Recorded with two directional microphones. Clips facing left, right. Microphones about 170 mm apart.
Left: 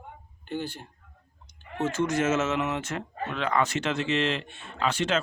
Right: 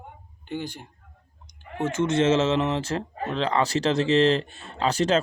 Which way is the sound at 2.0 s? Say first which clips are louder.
Right 5 dB; 25° right (ahead or behind).